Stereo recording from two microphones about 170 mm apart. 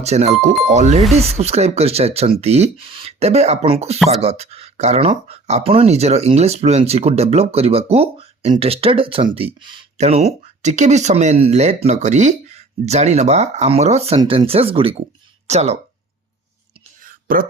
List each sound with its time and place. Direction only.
0.0 s speech: 40° right (ahead or behind)
10.0 s speech: 40° right (ahead or behind)
17.0 s whispering: 55° right (ahead or behind)